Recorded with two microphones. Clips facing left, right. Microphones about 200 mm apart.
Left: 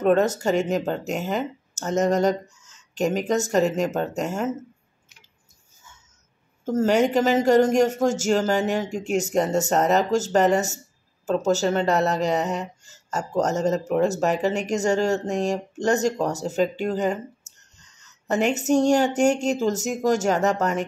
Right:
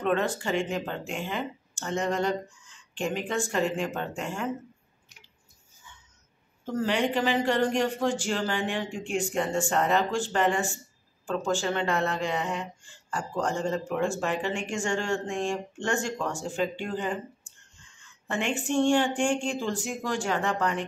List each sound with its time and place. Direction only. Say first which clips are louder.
0.0 s speech: left 7 dB; 45° left (ahead or behind)
6.6 s speech: left 7 dB; 45° left (ahead or behind)